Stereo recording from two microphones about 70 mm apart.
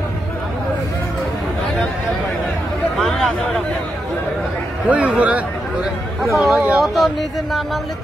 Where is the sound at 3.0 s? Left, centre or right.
Centre.